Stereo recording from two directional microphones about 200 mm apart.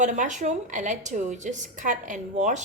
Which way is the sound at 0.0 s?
40° right (ahead or behind).